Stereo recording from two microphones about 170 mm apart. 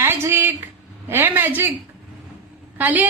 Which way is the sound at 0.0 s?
15° right (ahead or behind).